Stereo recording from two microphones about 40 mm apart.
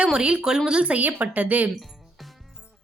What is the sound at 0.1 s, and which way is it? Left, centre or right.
Speech, right.